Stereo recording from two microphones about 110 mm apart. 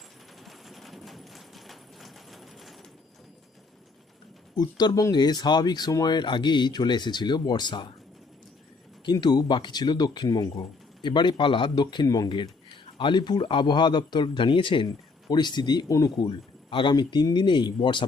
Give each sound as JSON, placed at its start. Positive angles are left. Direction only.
{"t": 0.4, "sound": "a sound", "side_deg": 0}
{"t": 4.5, "sound": "speech", "side_deg": 40}
{"t": 9.2, "sound": "speech", "side_deg": 40}